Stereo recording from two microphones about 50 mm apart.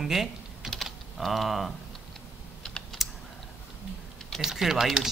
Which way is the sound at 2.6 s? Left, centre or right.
Centre.